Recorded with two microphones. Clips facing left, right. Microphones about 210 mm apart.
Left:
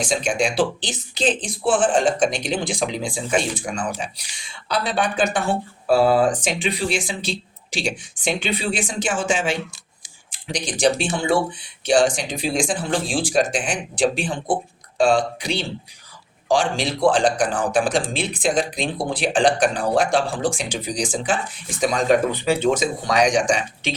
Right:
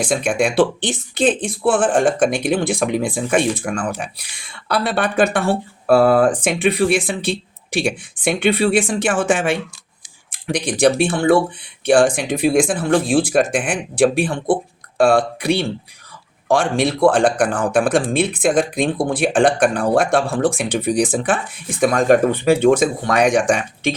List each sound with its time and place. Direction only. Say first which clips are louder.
0.0 s speech: right 4 dB; 55° right (ahead or behind)